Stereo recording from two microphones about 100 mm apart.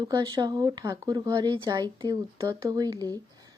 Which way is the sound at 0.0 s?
40° right (ahead or behind).